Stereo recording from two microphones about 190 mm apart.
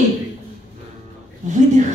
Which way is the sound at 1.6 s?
40° right (ahead or behind).